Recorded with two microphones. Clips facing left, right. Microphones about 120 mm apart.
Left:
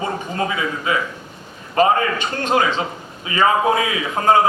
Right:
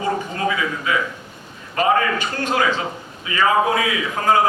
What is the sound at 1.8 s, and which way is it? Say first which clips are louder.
A man's voice: left 2 dB; 25° left (ahead or behind).